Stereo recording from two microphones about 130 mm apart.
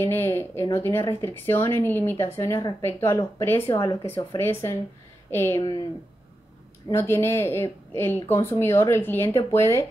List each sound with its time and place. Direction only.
0.0 s a woman's voice: 20° left (ahead or behind)
5.6 s speech: 30° left (ahead or behind)
6.9 s speech: 20° left (ahead or behind)